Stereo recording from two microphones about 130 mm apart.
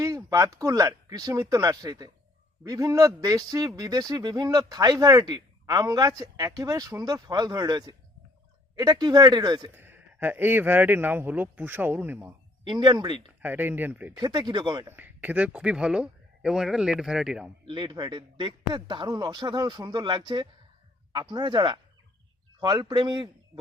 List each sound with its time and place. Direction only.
0.3 s a man's voice: 25° right (ahead or behind)
9.7 s speech: 15° right (ahead or behind)
12.6 s a man's voice: 35° right (ahead or behind)
13.4 s speech: 15° right (ahead or behind)
14.1 s a man's voice: 30° right (ahead or behind)
14.8 s speech: 15° right (ahead or behind)
17.7 s a man's voice: 35° right (ahead or behind)